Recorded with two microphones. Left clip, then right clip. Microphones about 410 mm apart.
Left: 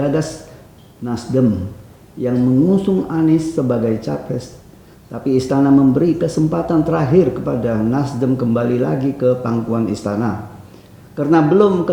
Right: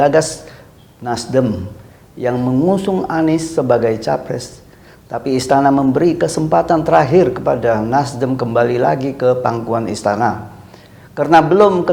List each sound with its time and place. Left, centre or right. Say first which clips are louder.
0.0 s speech: right 7 dB; right